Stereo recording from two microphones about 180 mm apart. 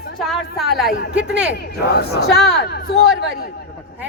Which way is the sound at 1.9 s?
65° left (ahead or behind).